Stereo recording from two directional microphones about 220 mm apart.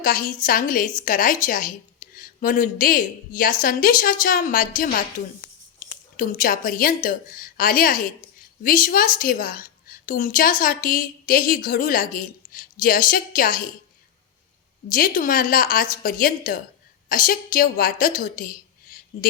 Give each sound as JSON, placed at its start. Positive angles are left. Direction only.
{"t": 0.0, "sound": "a woman's voice", "side_deg": 40}
{"t": 14.8, "sound": "a woman's voice", "side_deg": 40}